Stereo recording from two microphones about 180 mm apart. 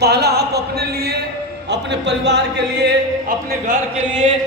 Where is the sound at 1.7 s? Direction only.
70° right (ahead or behind).